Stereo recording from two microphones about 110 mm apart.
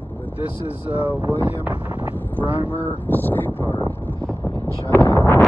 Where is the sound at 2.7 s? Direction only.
20° left (ahead or behind).